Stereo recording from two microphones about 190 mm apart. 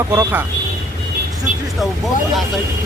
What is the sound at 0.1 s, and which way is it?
Speech, 15° right (ahead or behind).